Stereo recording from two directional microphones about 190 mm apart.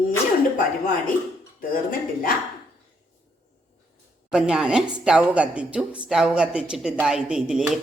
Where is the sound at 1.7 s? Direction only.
45° left (ahead or behind).